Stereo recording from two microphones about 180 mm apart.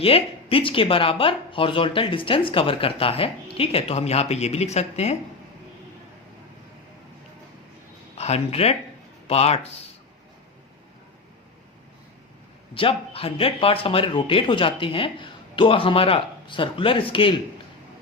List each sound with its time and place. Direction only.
0.0 s speech: 30° left (ahead or behind)
8.2 s speech: 35° left (ahead or behind)
12.7 s speech: 30° left (ahead or behind)